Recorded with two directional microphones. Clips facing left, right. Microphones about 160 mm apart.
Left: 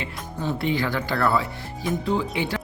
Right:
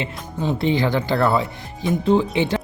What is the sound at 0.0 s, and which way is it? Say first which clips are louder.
Speech: right 4 dB; 25° right (ahead or behind).